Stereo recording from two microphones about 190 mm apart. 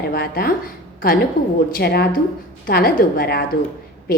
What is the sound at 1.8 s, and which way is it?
A woman's voice, 55° left (ahead or behind).